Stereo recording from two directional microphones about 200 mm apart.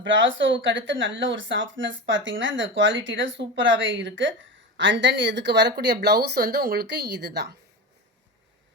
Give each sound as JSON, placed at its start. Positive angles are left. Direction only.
{"t": 0.0, "sound": "speech", "side_deg": -70}